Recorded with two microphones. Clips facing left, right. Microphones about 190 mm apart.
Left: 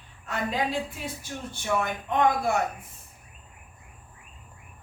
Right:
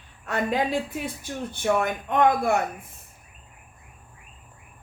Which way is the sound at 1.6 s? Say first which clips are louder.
Right 4 dB; 55° right (ahead or behind).